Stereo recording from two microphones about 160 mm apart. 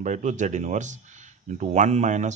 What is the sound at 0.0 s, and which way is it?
Speech, 50° right (ahead or behind).